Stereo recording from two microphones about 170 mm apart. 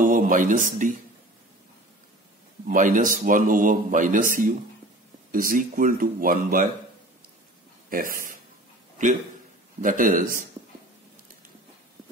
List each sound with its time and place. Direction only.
0.0 s speech: 50° right (ahead or behind)
2.7 s a man's voice: 50° right (ahead or behind)
7.9 s speech: 55° right (ahead or behind)
9.8 s a man's voice: 50° right (ahead or behind)